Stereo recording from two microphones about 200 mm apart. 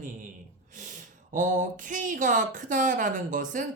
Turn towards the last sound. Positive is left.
turn(degrees=-40)  # may be behind; listen again after turning